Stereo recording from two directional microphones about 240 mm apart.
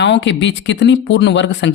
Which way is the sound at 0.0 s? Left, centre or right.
Left.